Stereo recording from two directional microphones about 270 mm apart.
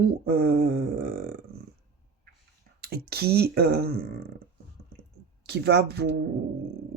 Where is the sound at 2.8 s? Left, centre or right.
Right.